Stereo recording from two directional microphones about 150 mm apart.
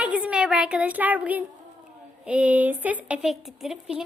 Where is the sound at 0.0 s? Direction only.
10° right (ahead or behind).